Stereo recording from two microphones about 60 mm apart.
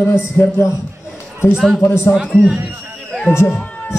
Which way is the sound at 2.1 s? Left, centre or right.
Centre.